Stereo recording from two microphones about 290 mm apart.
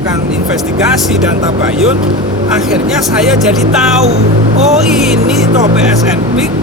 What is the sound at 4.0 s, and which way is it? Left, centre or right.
Speech, right.